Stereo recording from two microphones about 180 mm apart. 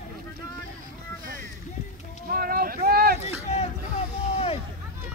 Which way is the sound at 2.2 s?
55° right (ahead or behind).